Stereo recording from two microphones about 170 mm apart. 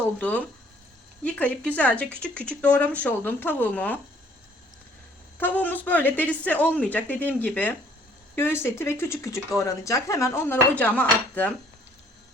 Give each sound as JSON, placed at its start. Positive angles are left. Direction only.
{"t": 0.2, "sound": "speech", "side_deg": 10}
{"t": 5.4, "sound": "speech", "side_deg": 10}